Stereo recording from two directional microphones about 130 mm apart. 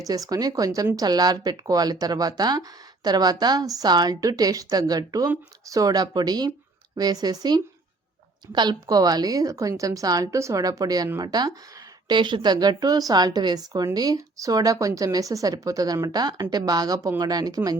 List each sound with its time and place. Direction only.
0.1 s speech: 30° right (ahead or behind)